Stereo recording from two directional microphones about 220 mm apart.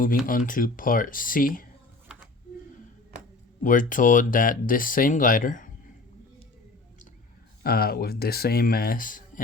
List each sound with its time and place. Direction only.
0.3 s speech: 40° left (ahead or behind)
3.6 s speech: 35° left (ahead or behind)
7.6 s speech: 45° left (ahead or behind)